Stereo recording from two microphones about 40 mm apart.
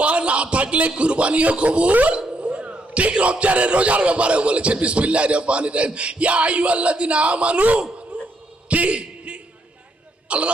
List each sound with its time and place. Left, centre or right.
0.0 s a man's voice: right
8.1 s dog: right
8.7 s speech: right
9.0 s a sound: right
10.2 s speech: right